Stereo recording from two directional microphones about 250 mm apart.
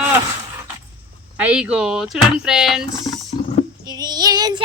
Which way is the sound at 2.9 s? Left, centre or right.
Centre.